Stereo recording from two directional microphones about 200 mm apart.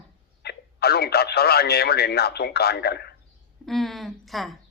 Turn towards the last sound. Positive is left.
turn(degrees=0)  # may be behind; listen again after turning